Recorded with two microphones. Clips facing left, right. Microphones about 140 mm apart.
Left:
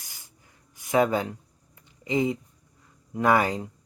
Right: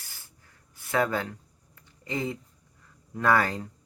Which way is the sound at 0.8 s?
15° left (ahead or behind).